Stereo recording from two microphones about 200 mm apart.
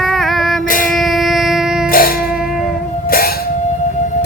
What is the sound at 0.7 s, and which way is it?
Music, 45° left (ahead or behind).